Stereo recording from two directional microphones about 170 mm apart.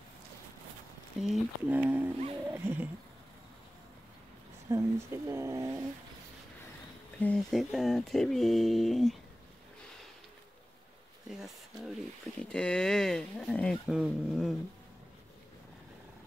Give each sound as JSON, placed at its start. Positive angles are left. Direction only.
{"t": 1.3, "sound": "speech", "side_deg": -10}
{"t": 2.5, "sound": "a sound", "side_deg": -15}
{"t": 4.6, "sound": "speech", "side_deg": -15}
{"t": 7.2, "sound": "speech", "side_deg": 5}
{"t": 11.2, "sound": "speech", "side_deg": 0}